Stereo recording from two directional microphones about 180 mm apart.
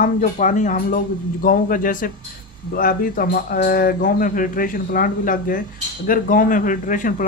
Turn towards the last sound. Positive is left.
turn(degrees=50)  # may be behind; listen again after turning